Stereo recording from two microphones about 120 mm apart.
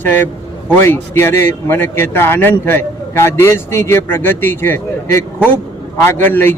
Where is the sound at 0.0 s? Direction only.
15° left (ahead or behind).